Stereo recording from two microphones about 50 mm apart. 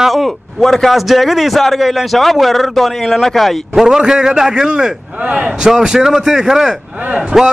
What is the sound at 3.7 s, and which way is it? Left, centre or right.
A man's voice, centre.